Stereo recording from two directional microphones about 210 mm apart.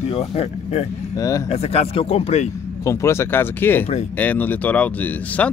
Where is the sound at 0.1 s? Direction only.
25° left (ahead or behind).